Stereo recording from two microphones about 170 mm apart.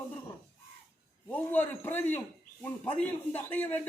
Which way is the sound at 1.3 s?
10° left (ahead or behind).